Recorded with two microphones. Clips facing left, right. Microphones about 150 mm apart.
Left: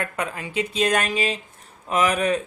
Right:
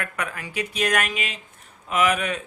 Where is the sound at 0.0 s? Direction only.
25° left (ahead or behind).